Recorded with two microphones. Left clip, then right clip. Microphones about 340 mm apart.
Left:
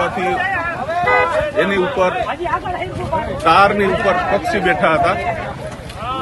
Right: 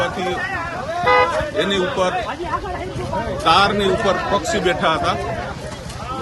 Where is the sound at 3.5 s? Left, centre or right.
Centre.